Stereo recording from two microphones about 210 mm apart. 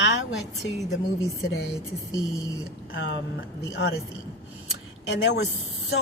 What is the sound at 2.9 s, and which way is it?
Speech, 55° left (ahead or behind).